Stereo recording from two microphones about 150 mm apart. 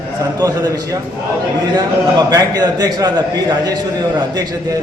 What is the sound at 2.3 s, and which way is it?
A man's voice, 25° right (ahead or behind).